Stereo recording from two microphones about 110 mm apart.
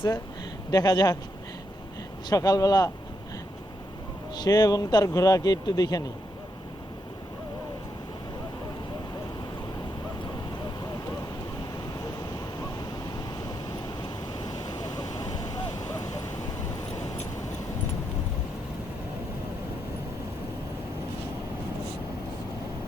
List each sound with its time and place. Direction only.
0.7 s speech: 35° left (ahead or behind)
2.3 s speech: 35° left (ahead or behind)
4.4 s speech: 35° left (ahead or behind)
13.8 s vehicle: 40° left (ahead or behind)